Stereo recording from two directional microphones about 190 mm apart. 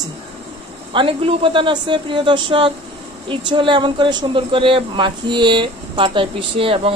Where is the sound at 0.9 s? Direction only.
30° right (ahead or behind).